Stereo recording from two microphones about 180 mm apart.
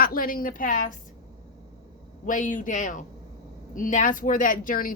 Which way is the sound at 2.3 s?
45° left (ahead or behind).